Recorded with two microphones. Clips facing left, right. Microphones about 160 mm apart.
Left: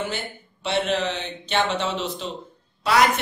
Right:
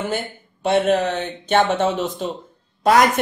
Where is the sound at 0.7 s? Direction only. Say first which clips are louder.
Right 6 dB; 50° right (ahead or behind).